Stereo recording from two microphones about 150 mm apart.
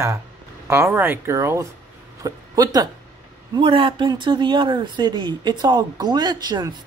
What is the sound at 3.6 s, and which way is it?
Speech, 35° right (ahead or behind).